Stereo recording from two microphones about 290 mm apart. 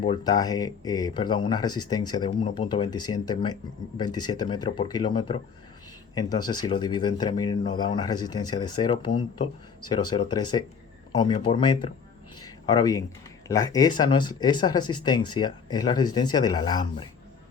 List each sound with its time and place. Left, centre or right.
0.0 s speech: centre
12.4 s a sound: centre
13.5 s speech: centre